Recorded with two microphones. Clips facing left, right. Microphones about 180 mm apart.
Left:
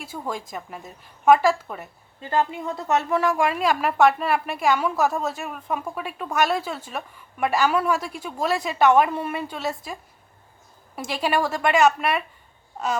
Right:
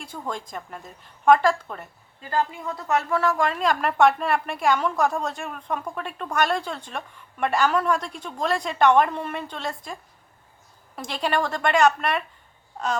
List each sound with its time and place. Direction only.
0.0 s a woman's voice: 5° left (ahead or behind)
2.2 s a woman's voice: 25° left (ahead or behind); by 12.2 s 5° left (ahead or behind)